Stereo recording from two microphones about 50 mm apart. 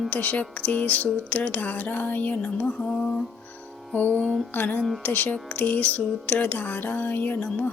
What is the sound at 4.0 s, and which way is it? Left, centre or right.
Speech, left.